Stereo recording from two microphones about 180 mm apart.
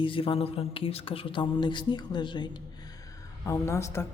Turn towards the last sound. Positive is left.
turn(degrees=15)  # may be behind; listen again after turning